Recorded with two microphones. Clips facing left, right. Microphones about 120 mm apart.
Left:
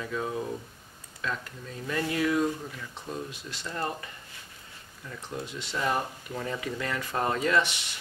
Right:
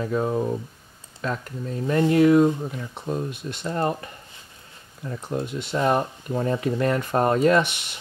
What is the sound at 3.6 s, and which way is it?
Speech, 40° right (ahead or behind).